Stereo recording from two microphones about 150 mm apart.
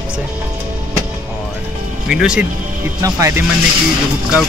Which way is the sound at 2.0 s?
5° right (ahead or behind).